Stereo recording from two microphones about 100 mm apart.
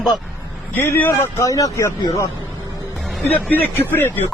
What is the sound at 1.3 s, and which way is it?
Speech, 35° left (ahead or behind).